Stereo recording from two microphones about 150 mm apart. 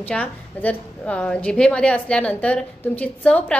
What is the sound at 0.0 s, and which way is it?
A woman's voice, 10° left (ahead or behind).